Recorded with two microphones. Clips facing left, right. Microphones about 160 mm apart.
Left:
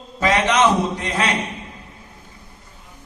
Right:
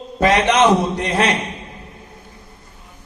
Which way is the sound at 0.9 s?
55° right (ahead or behind).